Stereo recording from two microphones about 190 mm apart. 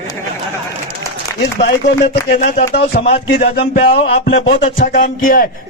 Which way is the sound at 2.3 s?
50° left (ahead or behind).